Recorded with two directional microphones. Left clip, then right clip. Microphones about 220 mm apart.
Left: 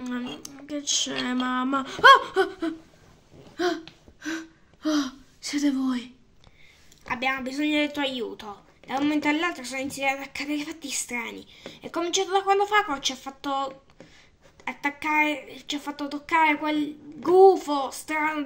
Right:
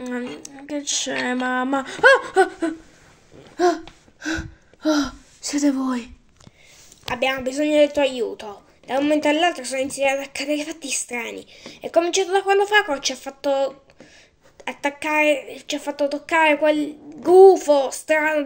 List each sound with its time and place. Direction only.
0.4 s speech: centre (ahead or behind)
3.5 s gasp: 10° right (ahead or behind)
7.1 s a woman's voice: 35° left (ahead or behind)